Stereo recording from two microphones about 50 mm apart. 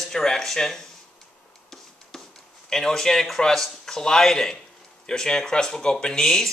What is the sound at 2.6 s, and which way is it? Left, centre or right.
Speech, centre.